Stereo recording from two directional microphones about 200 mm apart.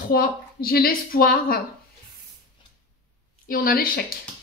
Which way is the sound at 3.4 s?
45° left (ahead or behind).